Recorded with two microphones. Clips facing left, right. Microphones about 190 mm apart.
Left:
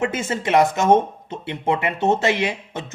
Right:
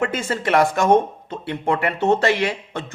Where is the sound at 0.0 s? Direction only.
20° left (ahead or behind).